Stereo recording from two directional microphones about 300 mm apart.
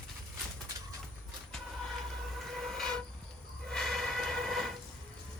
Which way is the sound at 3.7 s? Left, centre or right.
Centre.